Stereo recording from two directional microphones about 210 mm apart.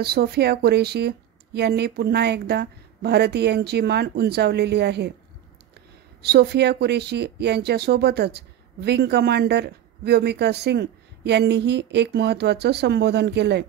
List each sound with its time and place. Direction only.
0.0 s speech: 50° right (ahead or behind)
6.2 s speech: 50° right (ahead or behind)